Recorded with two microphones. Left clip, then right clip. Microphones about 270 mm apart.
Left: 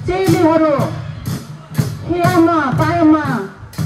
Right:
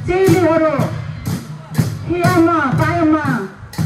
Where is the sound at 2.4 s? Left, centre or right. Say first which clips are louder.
Left 1 dB; left.